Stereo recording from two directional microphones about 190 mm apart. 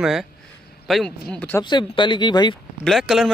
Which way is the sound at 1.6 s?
25° left (ahead or behind).